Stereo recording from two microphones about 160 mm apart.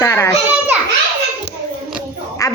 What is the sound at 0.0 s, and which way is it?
Speech, 20° left (ahead or behind).